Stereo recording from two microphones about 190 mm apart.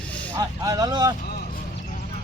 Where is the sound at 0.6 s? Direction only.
20° right (ahead or behind).